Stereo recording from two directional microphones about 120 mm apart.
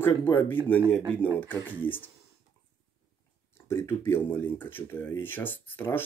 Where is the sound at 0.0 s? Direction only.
20° left (ahead or behind).